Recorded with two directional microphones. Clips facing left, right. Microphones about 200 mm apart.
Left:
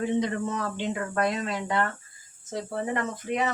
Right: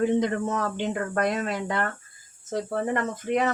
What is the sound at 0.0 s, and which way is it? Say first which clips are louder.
Speech: right 3 dB; 50° right (ahead or behind).